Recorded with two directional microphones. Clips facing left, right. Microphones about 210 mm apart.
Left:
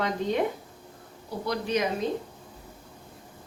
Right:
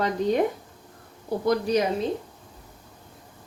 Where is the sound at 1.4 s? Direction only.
45° right (ahead or behind).